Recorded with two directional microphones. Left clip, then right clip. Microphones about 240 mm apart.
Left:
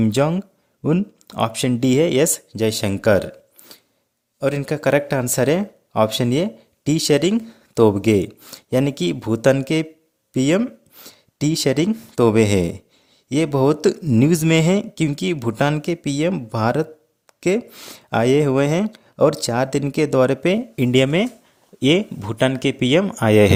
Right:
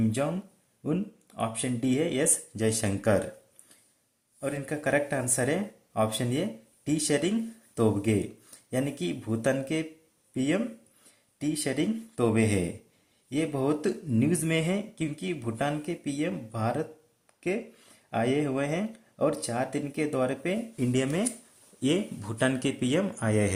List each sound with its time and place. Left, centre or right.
0.0 s speech: left
4.4 s speech: left